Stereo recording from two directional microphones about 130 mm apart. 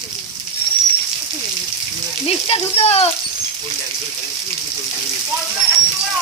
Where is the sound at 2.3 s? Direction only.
50° left (ahead or behind).